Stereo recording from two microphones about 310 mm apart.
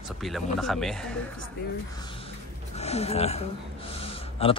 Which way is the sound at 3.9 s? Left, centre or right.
Centre.